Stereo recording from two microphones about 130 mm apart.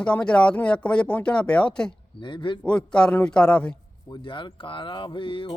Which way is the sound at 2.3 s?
40° left (ahead or behind).